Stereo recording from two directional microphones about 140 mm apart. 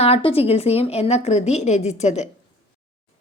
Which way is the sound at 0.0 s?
45° left (ahead or behind).